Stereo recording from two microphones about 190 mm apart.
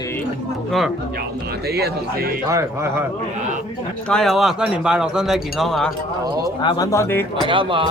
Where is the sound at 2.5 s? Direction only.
15° right (ahead or behind).